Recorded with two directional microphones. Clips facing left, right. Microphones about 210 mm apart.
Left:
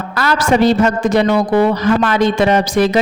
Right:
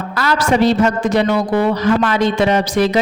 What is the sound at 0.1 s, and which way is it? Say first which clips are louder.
Speech: left 2 dB; 50° left (ahead or behind).